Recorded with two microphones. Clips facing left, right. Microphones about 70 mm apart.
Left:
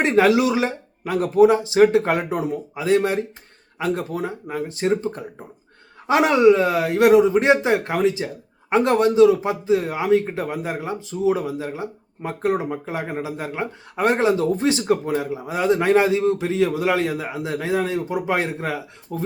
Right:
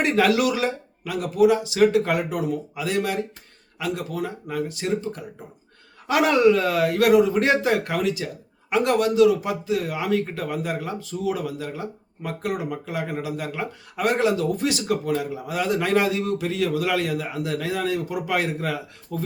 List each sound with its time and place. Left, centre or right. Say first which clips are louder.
0.0 s speech: left 3 dB; left